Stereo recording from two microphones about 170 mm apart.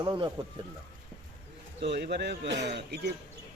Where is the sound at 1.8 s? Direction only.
80° right.